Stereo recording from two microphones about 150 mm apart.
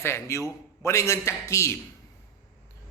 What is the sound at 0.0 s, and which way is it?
A man's voice, 20° left (ahead or behind).